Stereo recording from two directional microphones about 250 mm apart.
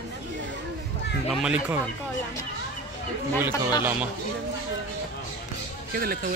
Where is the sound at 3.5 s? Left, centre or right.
Centre.